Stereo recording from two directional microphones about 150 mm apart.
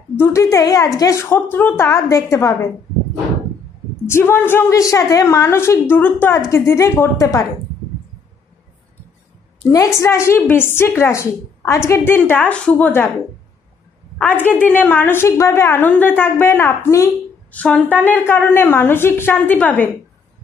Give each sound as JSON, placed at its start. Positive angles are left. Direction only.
{"t": 0.1, "sound": "a woman's voice", "side_deg": 15}
{"t": 4.0, "sound": "a woman's voice", "side_deg": 15}
{"t": 9.7, "sound": "a woman's voice", "side_deg": 20}
{"t": 14.1, "sound": "a woman's voice", "side_deg": 10}
{"t": 17.6, "sound": "a woman's voice", "side_deg": 5}